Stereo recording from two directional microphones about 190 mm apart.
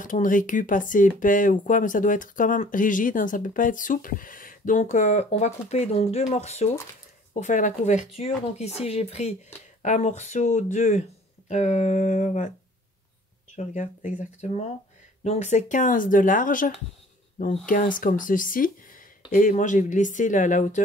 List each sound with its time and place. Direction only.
0.0 s speech: 45° left (ahead or behind)
13.6 s speech: 40° left (ahead or behind)